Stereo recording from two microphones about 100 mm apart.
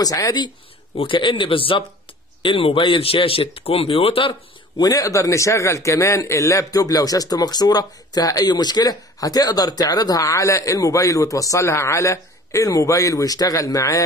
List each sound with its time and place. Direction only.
0.0 s speech: 35° left (ahead or behind)
0.9 s a man's voice: 60° left (ahead or behind)
4.7 s speech: 35° left (ahead or behind)